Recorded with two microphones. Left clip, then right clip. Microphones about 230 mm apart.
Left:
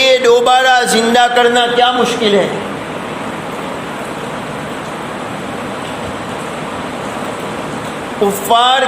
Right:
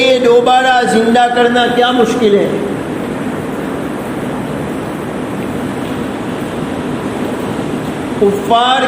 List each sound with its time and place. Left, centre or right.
0.0 s music: left
8.4 s speech: left